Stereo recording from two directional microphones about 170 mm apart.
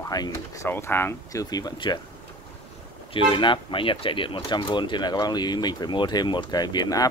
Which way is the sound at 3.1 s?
30° left (ahead or behind).